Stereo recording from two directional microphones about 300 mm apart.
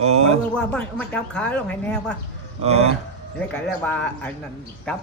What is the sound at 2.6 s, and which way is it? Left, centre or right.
Speech, right.